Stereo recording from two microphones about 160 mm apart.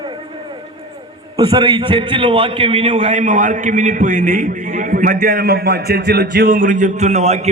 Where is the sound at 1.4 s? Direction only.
30° right (ahead or behind).